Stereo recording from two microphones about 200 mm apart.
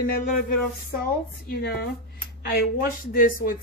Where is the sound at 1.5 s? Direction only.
55° left (ahead or behind).